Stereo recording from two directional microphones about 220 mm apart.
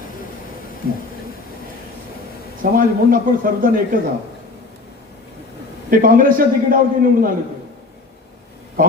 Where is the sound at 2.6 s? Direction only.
40° right (ahead or behind).